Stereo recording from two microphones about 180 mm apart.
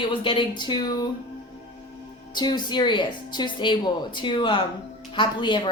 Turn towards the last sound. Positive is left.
turn(degrees=25)  # may be behind; listen again after turning